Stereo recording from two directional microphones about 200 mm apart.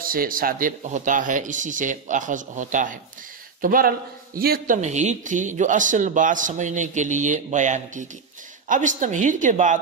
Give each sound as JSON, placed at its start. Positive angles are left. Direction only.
{"t": 0.0, "sound": "a man's voice", "side_deg": -45}
{"t": 4.8, "sound": "a man's voice", "side_deg": -35}